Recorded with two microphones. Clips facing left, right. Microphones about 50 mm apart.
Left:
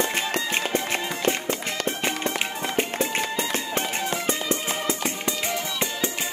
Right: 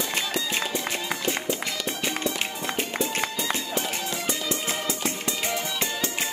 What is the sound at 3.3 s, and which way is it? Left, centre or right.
Run, left.